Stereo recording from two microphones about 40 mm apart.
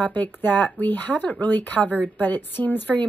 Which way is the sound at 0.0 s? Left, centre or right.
Left.